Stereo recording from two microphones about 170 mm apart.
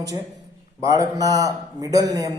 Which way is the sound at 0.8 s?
20° right (ahead or behind).